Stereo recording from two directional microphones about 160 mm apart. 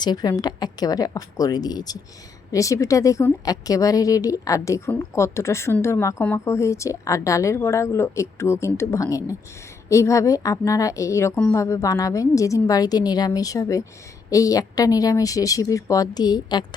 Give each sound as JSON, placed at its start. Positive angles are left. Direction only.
{"t": 0.0, "sound": "a woman's voice", "side_deg": 25}